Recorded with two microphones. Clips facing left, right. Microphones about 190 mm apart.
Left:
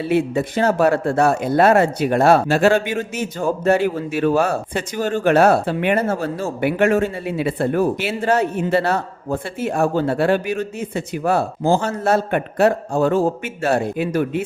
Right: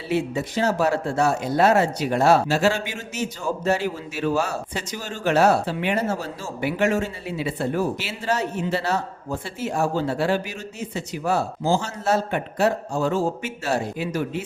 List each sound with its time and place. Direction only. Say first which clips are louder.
0.0 s speech: left 6 dB; 55° left (ahead or behind)